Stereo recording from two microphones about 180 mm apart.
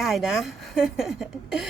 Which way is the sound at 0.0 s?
Centre (ahead or behind).